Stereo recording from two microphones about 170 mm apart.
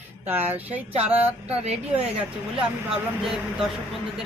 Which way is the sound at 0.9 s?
35° right (ahead or behind).